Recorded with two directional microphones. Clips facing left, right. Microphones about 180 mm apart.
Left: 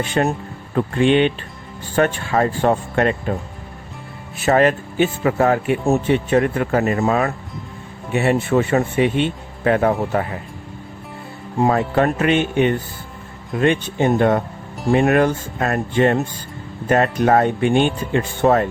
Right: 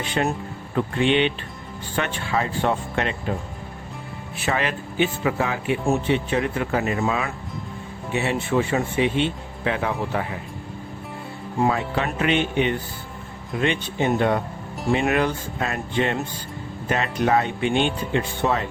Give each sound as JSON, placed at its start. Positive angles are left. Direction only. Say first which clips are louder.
{"t": 0.2, "sound": "speech", "louder": "left 3 dB", "side_deg": 45}
{"t": 4.4, "sound": "speech", "louder": "left 10 dB", "side_deg": 45}
{"t": 11.7, "sound": "speech", "louder": "left 7 dB", "side_deg": 50}